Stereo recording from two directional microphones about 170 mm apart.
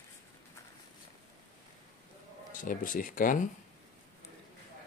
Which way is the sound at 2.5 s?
50° left (ahead or behind).